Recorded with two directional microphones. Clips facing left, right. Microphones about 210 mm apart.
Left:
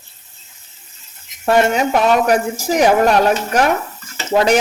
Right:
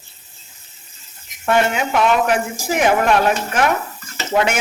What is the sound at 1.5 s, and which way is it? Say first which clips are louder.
Speech: left 3 dB; 40° left (ahead or behind).